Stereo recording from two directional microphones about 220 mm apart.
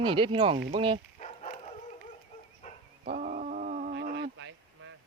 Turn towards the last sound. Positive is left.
turn(degrees=-60)  # may be behind; listen again after turning